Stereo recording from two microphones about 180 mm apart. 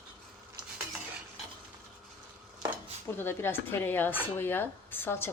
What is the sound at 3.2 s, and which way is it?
Speech, 10° left (ahead or behind).